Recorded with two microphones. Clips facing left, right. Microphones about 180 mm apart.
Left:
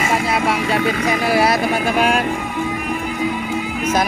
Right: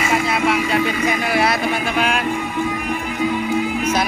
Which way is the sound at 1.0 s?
35° left (ahead or behind).